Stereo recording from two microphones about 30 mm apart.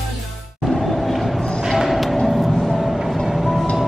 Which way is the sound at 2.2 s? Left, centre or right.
Centre.